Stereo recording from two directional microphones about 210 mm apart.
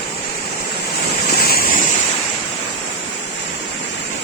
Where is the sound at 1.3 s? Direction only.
45° left (ahead or behind).